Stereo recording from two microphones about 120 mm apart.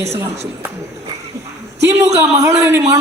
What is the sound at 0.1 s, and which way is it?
Speech, 20° right (ahead or behind).